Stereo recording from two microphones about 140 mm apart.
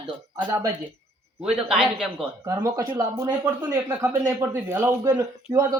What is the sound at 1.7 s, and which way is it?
Speech, 5° right (ahead or behind).